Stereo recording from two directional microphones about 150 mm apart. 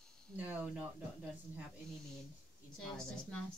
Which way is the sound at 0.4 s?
10° right (ahead or behind).